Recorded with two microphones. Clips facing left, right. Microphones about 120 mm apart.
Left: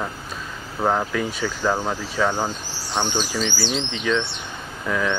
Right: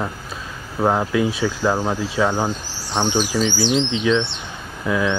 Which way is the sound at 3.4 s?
15° right (ahead or behind).